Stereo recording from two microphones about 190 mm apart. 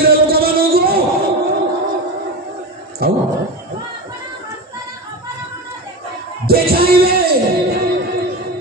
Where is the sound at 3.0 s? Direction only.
55° right (ahead or behind).